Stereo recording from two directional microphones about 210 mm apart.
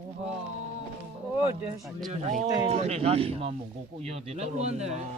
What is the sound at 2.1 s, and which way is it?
Speech, 35° right (ahead or behind).